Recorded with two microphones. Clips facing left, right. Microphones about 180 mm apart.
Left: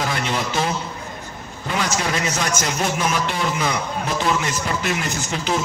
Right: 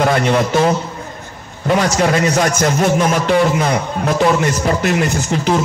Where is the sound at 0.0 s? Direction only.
60° right (ahead or behind).